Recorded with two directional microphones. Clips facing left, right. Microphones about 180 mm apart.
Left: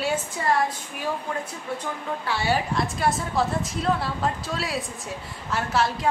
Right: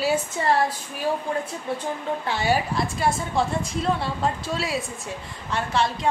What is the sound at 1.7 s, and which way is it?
Speech, 25° right (ahead or behind).